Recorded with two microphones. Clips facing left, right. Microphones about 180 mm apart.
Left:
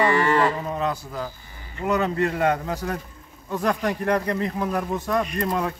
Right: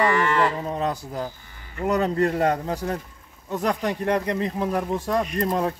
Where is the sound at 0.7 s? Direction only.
35° right (ahead or behind).